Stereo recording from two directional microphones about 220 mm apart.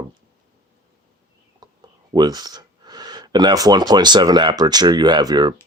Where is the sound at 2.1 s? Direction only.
20° right (ahead or behind).